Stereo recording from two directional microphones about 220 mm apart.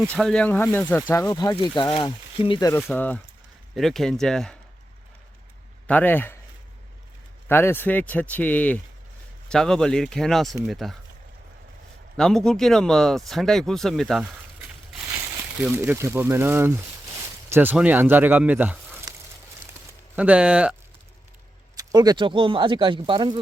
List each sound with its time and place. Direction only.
0.0 s speech: 5° left (ahead or behind)
5.9 s speech: 10° left (ahead or behind)
7.4 s speech: 10° left (ahead or behind)
12.1 s speech: 5° left (ahead or behind)
15.6 s speech: 10° right (ahead or behind)
20.1 s speech: 5° right (ahead or behind)
21.8 s speech: 20° right (ahead or behind)